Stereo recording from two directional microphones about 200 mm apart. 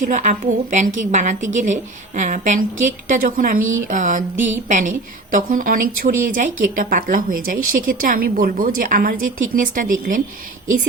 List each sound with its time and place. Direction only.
0.0 s a woman's voice: 40° right (ahead or behind)